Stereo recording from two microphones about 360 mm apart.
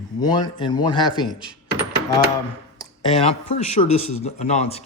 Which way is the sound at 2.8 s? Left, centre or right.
Centre.